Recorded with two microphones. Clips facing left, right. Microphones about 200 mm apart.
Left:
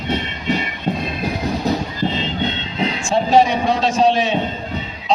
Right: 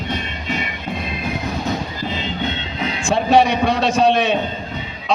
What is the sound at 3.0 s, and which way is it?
A man's voice, 65° right (ahead or behind).